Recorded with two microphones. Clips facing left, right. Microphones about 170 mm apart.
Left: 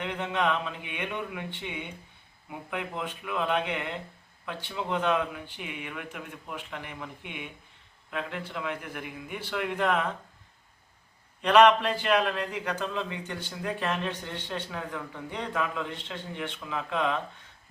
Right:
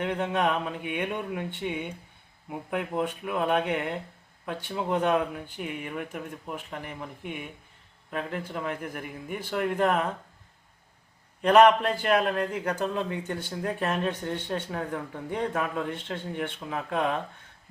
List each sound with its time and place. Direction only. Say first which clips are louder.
0.0 s a man's voice: right 3 dB; 45° right (ahead or behind)
11.4 s a man's voice: right 1 dB; 40° right (ahead or behind)